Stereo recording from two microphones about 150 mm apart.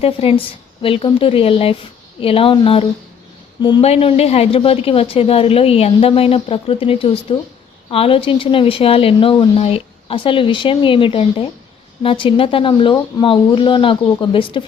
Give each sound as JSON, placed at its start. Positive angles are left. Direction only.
{"t": 0.0, "sound": "speech", "side_deg": 40}